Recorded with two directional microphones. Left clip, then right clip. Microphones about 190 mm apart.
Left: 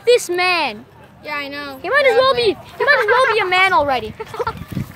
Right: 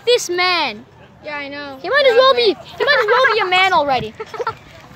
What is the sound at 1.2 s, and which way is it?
Speech, 40° left (ahead or behind).